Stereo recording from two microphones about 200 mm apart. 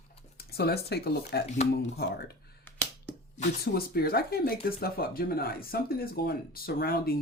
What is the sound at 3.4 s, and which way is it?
Speech, 50° left (ahead or behind).